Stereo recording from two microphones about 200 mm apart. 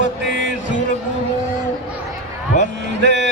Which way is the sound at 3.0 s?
60° right (ahead or behind).